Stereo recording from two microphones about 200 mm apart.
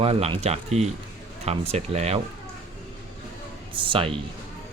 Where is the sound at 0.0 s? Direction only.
30° right (ahead or behind).